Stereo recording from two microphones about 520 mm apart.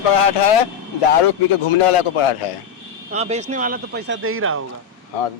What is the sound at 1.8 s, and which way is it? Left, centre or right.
Speech, left.